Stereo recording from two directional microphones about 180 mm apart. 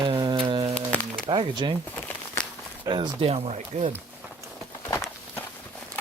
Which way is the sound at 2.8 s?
25° right (ahead or behind).